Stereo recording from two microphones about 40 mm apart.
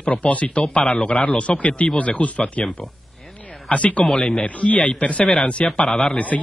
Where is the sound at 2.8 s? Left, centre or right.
Centre.